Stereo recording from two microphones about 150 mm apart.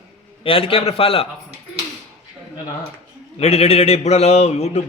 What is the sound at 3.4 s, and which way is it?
A man's voice, 40° left (ahead or behind).